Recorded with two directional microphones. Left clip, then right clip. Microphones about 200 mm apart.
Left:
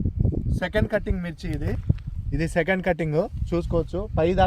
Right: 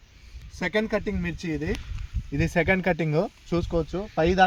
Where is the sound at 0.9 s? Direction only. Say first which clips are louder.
Left 1 dB; 5° left (ahead or behind).